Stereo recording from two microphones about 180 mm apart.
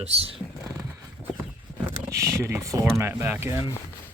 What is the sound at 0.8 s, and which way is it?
Horse, 15° right (ahead or behind).